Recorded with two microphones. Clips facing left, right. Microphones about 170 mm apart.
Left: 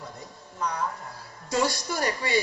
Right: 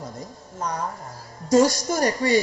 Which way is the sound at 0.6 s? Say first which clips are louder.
Right 1 dB; 45° right (ahead or behind).